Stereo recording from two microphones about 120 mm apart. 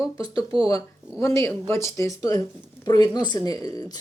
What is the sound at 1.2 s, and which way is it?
Speech, 25° left (ahead or behind).